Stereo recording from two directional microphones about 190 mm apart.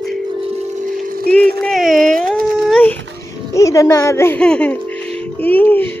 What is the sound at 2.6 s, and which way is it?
Dog, 5° left (ahead or behind).